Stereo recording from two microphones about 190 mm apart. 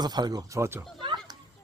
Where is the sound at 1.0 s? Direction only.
25° right (ahead or behind).